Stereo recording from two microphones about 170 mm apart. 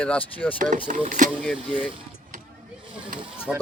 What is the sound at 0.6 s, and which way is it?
Speech, 50° right (ahead or behind).